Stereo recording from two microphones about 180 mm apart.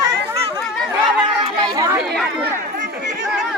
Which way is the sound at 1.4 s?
25° right (ahead or behind).